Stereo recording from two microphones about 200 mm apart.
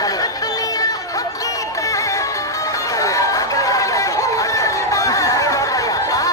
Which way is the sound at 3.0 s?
15° left (ahead or behind).